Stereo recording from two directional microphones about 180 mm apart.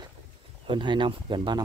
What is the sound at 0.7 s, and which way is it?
Speech, 25° right (ahead or behind).